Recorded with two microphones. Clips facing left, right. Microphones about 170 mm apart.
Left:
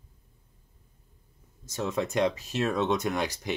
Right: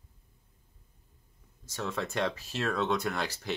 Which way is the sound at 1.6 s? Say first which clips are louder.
Left 5 dB; 20° left (ahead or behind).